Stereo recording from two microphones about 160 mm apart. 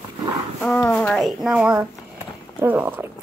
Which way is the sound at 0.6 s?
10° left (ahead or behind).